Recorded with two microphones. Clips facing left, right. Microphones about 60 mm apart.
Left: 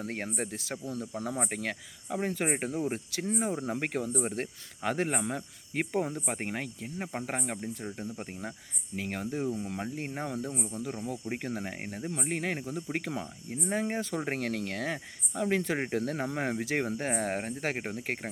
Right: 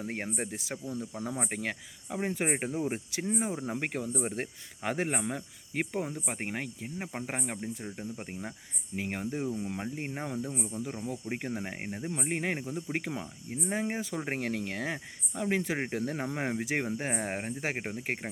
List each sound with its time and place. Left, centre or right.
0.0 s speech: centre